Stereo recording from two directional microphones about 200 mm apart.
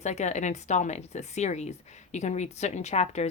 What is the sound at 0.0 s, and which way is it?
Speech, 35° left (ahead or behind).